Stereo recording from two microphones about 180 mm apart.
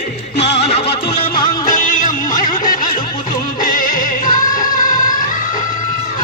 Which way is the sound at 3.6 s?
50° left (ahead or behind).